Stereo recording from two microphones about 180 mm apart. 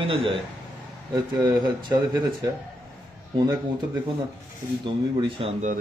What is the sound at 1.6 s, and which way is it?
Speech, 25° right (ahead or behind).